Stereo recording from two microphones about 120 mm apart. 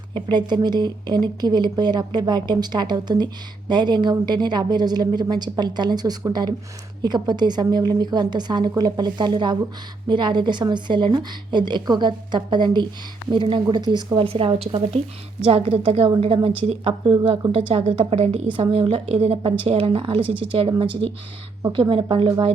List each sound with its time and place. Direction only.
0.1 s speech: 40° right (ahead or behind); by 16.0 s 55° right (ahead or behind)
16.0 s speech: 35° right (ahead or behind)
16.6 s speech: 50° right (ahead or behind)
19.1 s speech: 65° right (ahead or behind)
19.6 s speech: 50° right (ahead or behind)